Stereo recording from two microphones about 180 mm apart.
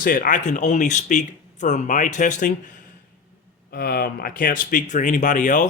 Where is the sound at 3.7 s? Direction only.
55° left (ahead or behind).